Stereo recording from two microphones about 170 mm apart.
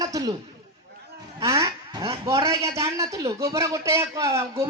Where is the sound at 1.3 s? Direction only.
20° right (ahead or behind).